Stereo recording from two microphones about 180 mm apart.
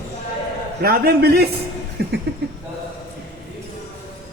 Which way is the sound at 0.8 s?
60° right (ahead or behind).